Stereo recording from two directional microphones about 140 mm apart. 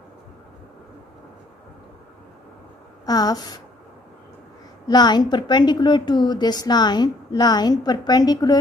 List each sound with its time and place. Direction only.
3.1 s a woman's voice: 25° left (ahead or behind)
4.8 s a woman's voice: 30° left (ahead or behind)